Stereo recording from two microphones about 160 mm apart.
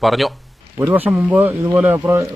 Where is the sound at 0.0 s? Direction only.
Centre (ahead or behind).